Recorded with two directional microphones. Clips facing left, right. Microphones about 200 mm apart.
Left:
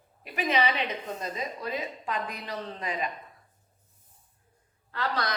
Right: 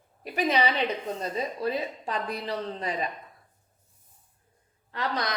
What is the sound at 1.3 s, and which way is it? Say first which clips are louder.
A woman's voice: right 6 dB; 30° right (ahead or behind).